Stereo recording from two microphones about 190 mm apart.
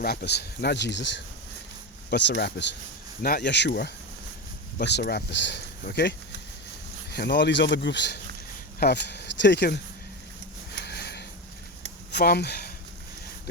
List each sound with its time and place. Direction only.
0.0 s speech: 55° left (ahead or behind)
10.8 s a sound: 60° left (ahead or behind)
12.1 s speech: 55° left (ahead or behind)